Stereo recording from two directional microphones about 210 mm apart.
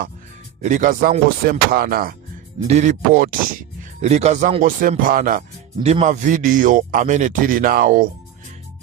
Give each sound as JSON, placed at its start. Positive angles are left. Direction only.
{"t": 0.6, "sound": "speech", "side_deg": -35}